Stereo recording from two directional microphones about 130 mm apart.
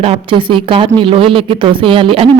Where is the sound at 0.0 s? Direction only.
45° right (ahead or behind).